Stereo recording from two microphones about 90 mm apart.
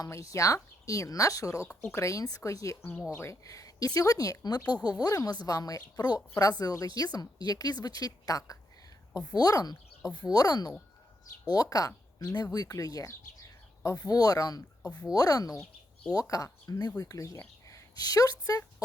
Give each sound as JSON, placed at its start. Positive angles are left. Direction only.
{"t": 0.0, "sound": "speech", "side_deg": 35}
{"t": 17.3, "sound": "speech", "side_deg": 30}